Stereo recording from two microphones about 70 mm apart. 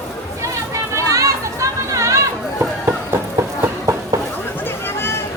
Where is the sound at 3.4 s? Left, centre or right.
Right.